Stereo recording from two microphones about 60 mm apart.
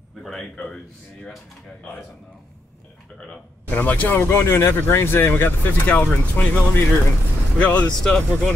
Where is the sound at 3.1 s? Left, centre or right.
Left.